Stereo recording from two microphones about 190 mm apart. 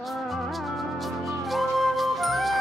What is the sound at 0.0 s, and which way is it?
Music, centre (ahead or behind).